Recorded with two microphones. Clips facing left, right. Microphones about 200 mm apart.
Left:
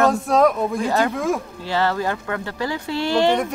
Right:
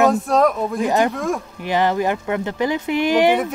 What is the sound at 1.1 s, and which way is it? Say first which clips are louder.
Speech: left 1 dB; centre (ahead or behind).